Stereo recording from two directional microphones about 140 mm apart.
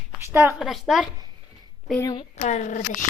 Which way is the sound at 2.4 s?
60° left (ahead or behind).